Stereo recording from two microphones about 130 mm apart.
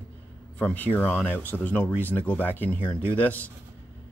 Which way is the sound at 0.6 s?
10° left (ahead or behind).